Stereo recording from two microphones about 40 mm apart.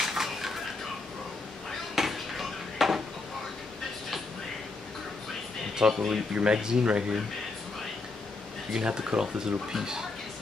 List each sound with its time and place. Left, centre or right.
0.0 s a sound: centre
2.0 s dishes: centre
5.8 s speech: centre
8.8 s speech: centre